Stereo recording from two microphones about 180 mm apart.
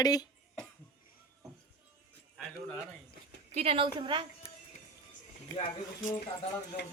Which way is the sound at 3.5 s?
30° right (ahead or behind).